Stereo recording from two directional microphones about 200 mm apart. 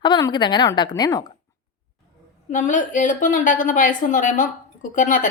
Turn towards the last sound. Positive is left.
turn(degrees=40)  # may be behind; listen again after turning